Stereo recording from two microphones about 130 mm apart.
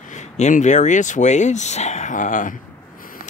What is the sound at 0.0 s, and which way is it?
Speech, 65° left (ahead or behind).